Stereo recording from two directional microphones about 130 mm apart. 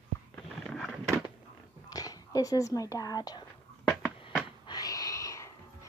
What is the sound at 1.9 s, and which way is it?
Speech, 30° left (ahead or behind).